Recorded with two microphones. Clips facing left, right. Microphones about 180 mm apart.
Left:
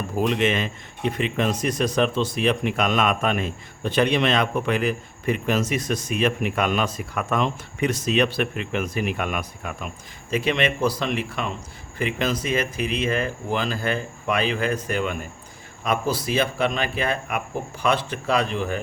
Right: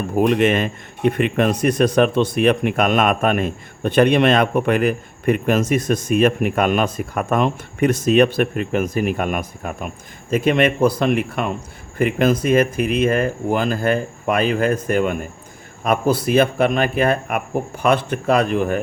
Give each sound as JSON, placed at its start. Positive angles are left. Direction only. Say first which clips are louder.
{"t": 0.2, "sound": "speech", "louder": "right 6 dB", "side_deg": -50}